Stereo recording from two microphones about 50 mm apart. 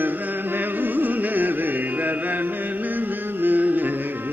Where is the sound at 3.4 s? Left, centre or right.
Right.